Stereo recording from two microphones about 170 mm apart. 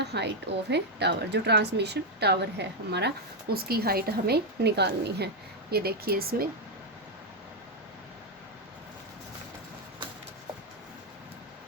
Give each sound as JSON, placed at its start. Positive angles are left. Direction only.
{"t": 0.0, "sound": "a woman's voice", "side_deg": -80}
{"t": 3.5, "sound": "a woman's voice", "side_deg": -65}
{"t": 5.7, "sound": "speech", "side_deg": -65}